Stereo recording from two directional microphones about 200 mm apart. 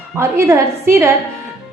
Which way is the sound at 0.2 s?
15° right (ahead or behind).